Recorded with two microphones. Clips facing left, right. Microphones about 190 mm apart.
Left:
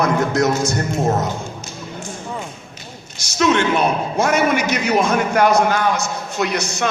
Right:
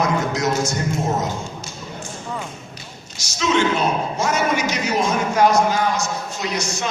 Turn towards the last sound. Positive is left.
turn(degrees=60)  # may be behind; listen again after turning